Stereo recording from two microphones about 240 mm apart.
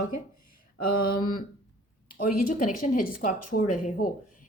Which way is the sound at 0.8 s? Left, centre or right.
Left.